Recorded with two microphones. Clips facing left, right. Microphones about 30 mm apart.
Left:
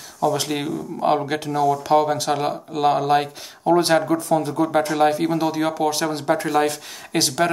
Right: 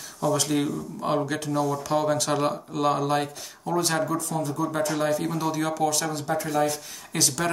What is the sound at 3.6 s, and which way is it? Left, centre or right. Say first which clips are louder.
Speech: left 9 dB; left.